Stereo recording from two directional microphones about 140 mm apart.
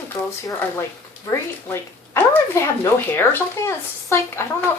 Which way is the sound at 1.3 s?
15° left (ahead or behind).